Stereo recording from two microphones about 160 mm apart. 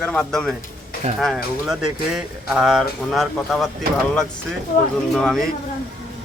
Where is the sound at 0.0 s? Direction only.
5° left (ahead or behind).